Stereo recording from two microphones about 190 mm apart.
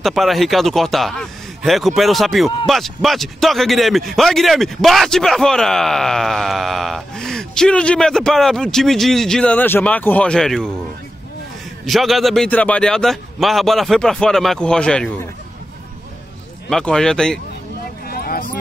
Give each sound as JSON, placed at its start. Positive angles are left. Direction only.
{"t": 0.0, "sound": "speech", "side_deg": 0}
{"t": 11.8, "sound": "speech", "side_deg": 0}
{"t": 16.6, "sound": "speech", "side_deg": 5}
{"t": 18.0, "sound": "a sound", "side_deg": 50}